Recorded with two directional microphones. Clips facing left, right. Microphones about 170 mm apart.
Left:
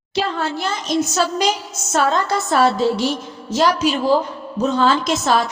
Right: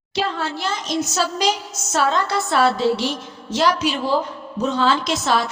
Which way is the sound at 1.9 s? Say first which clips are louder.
Left 2 dB; 40° left (ahead or behind).